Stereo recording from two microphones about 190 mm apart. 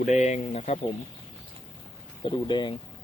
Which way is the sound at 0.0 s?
35° left (ahead or behind).